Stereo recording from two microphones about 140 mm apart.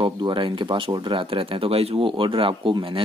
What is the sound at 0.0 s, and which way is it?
Speech, 35° right (ahead or behind).